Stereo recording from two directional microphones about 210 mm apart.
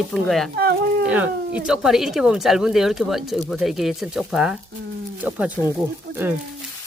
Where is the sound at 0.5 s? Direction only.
50° right (ahead or behind).